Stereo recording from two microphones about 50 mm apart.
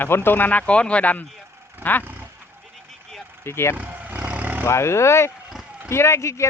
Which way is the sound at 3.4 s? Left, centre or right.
Left.